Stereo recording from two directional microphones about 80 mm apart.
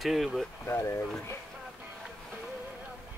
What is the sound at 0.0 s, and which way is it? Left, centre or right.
Speech, centre.